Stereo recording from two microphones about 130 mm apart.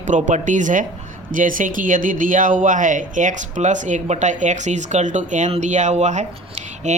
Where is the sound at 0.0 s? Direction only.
70° right (ahead or behind).